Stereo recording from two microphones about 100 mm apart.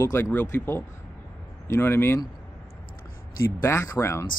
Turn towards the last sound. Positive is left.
turn(degrees=25)  # may be behind; listen again after turning